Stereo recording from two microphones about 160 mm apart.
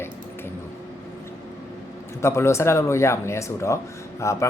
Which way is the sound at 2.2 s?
15° left (ahead or behind).